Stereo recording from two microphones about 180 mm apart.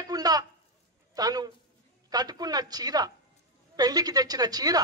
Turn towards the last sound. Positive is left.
turn(degrees=-20)  # may be behind; listen again after turning